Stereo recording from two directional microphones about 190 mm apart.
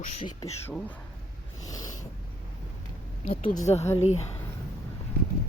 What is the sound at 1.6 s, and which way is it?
Snort, 20° left (ahead or behind).